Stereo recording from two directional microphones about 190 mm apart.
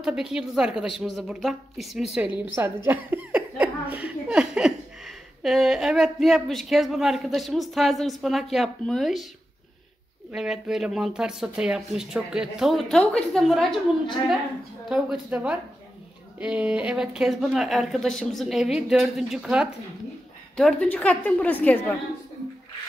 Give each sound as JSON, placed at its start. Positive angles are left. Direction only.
{"t": 0.0, "sound": "speech", "side_deg": -5}
{"t": 10.3, "sound": "speech", "side_deg": 0}
{"t": 14.9, "sound": "a woman's voice", "side_deg": -5}